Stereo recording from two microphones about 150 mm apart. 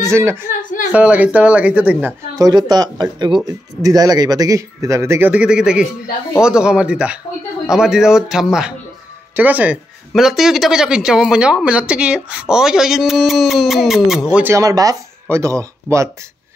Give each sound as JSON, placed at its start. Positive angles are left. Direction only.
{"t": 0.0, "sound": "a woman's voice", "side_deg": -20}
{"t": 0.5, "sound": "a sound", "side_deg": 60}
{"t": 0.9, "sound": "speech", "side_deg": -10}
{"t": 2.3, "sound": "speech", "side_deg": -25}
{"t": 14.3, "sound": "speech", "side_deg": -15}